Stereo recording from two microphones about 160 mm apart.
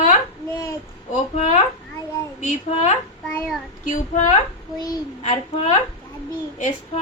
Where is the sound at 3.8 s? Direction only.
55° left (ahead or behind).